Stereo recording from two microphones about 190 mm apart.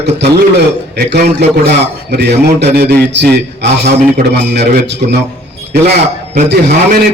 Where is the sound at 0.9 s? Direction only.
60° right (ahead or behind).